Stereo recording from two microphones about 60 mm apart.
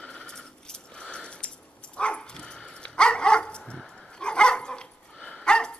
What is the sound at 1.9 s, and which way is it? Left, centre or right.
Dog, centre.